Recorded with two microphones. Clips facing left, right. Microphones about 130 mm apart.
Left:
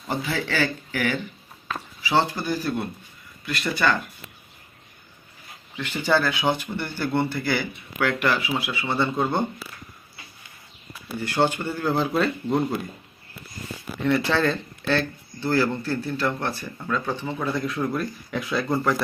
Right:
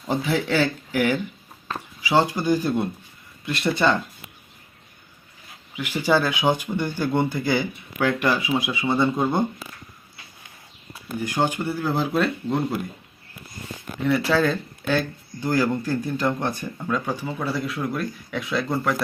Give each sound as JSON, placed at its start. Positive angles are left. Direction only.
{"t": 0.1, "sound": "speech", "side_deg": -15}
{"t": 5.7, "sound": "speech", "side_deg": -10}
{"t": 11.2, "sound": "speech", "side_deg": -15}
{"t": 13.8, "sound": "speech", "side_deg": 5}
{"t": 14.1, "sound": "speech", "side_deg": -5}